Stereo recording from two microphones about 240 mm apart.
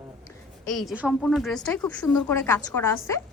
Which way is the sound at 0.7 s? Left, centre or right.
Centre.